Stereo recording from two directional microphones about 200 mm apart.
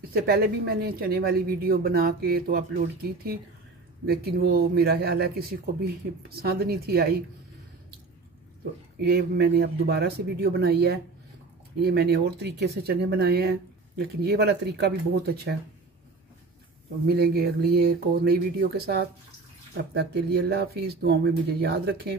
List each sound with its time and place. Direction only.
0.1 s speech: 50° right (ahead or behind)
6.4 s speech: 50° right (ahead or behind)
9.0 s speech: 55° right (ahead or behind)
17.1 s speech: 50° right (ahead or behind)